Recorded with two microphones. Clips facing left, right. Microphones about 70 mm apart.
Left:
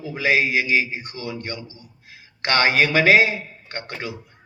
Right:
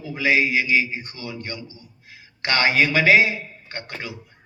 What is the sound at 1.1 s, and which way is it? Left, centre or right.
A man's voice, left.